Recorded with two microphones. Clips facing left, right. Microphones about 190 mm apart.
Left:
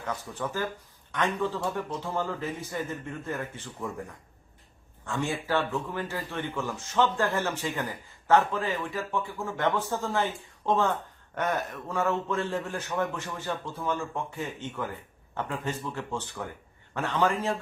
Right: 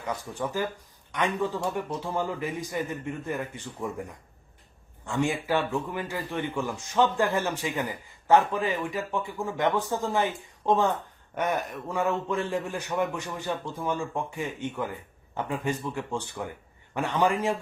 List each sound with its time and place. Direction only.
0.0 s speech: 15° right (ahead or behind)
5.0 s speech: 15° right (ahead or behind)